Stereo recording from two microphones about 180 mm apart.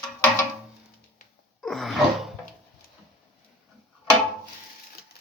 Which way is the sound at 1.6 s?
Centre (ahead or behind).